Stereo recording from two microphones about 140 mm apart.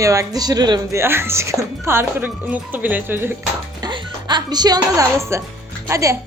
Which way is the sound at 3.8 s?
30° right (ahead or behind).